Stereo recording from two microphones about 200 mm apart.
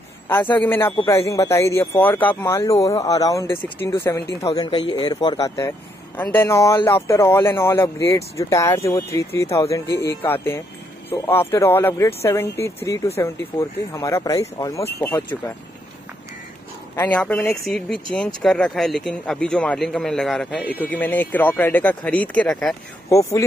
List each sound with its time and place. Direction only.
0.3 s speech: 10° left (ahead or behind)
16.9 s speech: 10° left (ahead or behind)
23.0 s speech: 15° left (ahead or behind)